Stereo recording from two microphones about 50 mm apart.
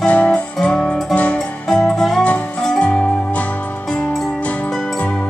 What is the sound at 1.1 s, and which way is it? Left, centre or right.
Music, left.